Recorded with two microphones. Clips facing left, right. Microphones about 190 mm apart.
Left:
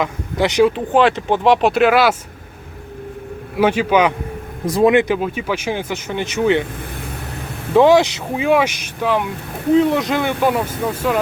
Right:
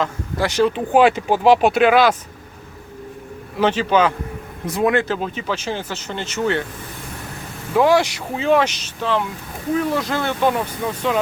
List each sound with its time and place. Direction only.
0.0 s speech: 20° left (ahead or behind)
0.9 s speech: 5° right (ahead or behind)
3.6 s speech: 10° left (ahead or behind)
7.7 s speech: 25° left (ahead or behind); by 11.2 s 5° left (ahead or behind)